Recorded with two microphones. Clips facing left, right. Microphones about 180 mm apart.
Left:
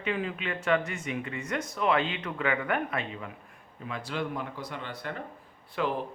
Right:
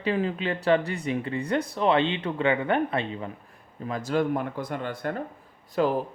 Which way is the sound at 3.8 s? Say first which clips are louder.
Right 8 dB; 40° right (ahead or behind).